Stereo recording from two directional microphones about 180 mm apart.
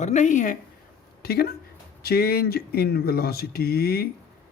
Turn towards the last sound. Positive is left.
turn(degrees=60)  # may be behind; listen again after turning